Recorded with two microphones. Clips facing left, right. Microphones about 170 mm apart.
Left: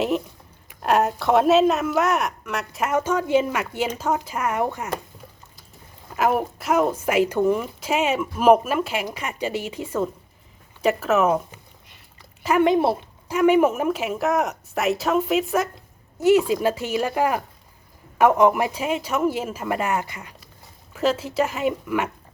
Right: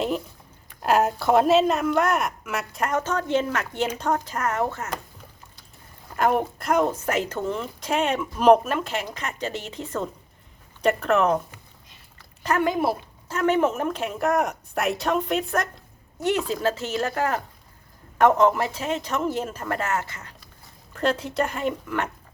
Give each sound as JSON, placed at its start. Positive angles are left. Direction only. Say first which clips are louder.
{"t": 0.7, "sound": "speech", "louder": "left 1 dB", "side_deg": 0}
{"t": 6.1, "sound": "a woman's voice", "louder": "left 1 dB", "side_deg": 5}
{"t": 12.4, "sound": "a sound", "louder": "left 4 dB", "side_deg": 10}
{"t": 12.6, "sound": "speech", "louder": "left 5 dB", "side_deg": 25}
{"t": 13.3, "sound": "a woman's voice", "louder": "left 4 dB", "side_deg": 10}